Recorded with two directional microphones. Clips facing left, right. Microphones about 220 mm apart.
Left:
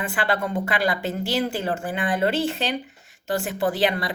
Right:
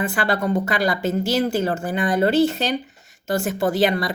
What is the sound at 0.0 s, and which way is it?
Speech, 40° right (ahead or behind).